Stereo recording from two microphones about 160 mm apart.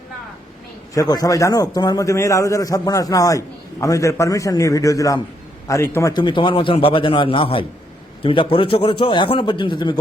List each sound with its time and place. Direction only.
0.9 s a man's voice: 25° left (ahead or behind)